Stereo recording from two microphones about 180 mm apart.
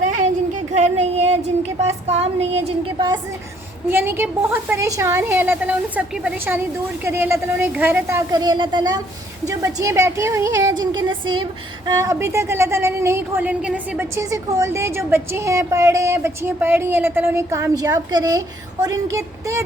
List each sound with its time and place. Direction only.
0.7 s child singing: 40° right (ahead or behind)
1.8 s a woman's voice: 35° right (ahead or behind)
3.8 s a woman's voice: 10° right (ahead or behind)